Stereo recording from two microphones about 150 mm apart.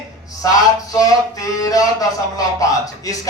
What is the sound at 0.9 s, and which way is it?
Speech, 25° left (ahead or behind).